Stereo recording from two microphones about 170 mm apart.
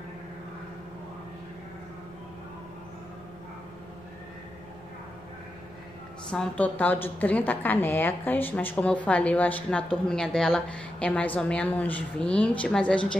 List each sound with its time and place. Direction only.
6.3 s a woman's voice: 5° left (ahead or behind)